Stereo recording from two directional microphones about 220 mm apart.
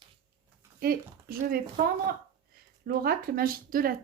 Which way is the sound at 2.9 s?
40° right (ahead or behind).